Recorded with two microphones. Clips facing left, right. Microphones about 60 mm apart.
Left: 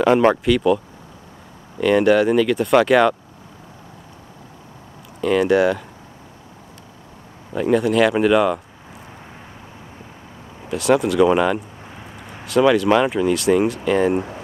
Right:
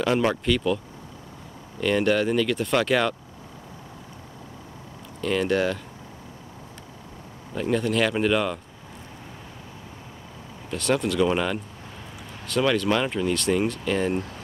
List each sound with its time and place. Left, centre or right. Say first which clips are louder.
0.0 s speech: left 8 dB; left
1.8 s speech: left 7 dB; centre
5.2 s speech: left 7 dB; centre
7.5 s speech: left 7 dB; centre
10.7 s speech: left 7 dB; centre